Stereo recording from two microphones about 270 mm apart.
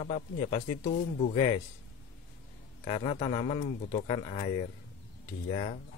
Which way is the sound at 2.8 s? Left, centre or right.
Centre.